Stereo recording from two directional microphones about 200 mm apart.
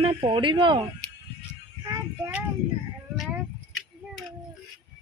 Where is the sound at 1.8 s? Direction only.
10° right (ahead or behind).